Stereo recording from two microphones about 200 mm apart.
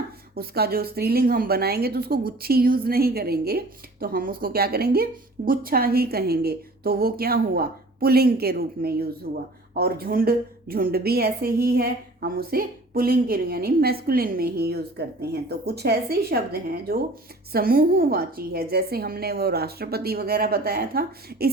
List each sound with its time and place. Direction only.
0.3 s a woman's voice: 50° right (ahead or behind)